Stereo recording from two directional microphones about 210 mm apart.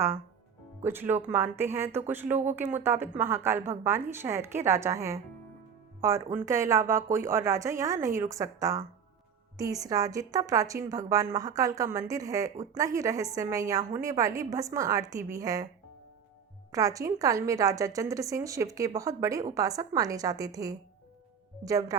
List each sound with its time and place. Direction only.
0.9 s a woman's voice: 10° right (ahead or behind)
16.7 s a woman's voice: 15° right (ahead or behind)